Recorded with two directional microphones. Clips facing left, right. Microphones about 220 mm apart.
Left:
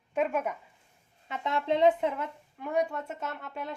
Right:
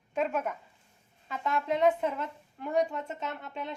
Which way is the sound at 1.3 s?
25° left (ahead or behind).